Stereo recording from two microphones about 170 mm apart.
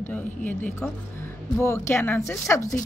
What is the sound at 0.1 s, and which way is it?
Speech, 10° left (ahead or behind).